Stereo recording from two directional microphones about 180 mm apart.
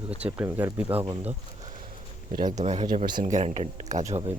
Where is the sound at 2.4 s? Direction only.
40° right (ahead or behind).